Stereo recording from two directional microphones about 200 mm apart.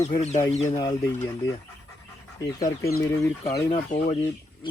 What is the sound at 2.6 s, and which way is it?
Speech, 15° left (ahead or behind).